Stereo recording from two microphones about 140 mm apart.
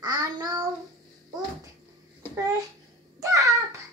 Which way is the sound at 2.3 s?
25° right (ahead or behind).